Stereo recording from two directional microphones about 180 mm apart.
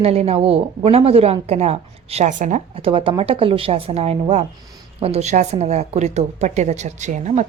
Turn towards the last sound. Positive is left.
turn(degrees=-40)  # may be behind; listen again after turning